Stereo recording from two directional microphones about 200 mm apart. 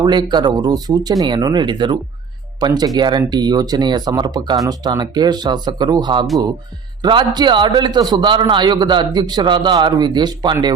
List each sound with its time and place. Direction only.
0.0 s a man's voice: 20° right (ahead or behind)